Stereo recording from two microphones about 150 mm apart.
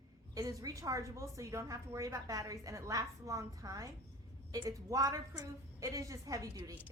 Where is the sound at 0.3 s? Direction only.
25° right (ahead or behind).